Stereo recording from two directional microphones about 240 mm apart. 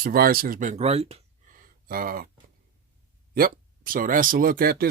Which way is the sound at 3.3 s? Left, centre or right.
Right.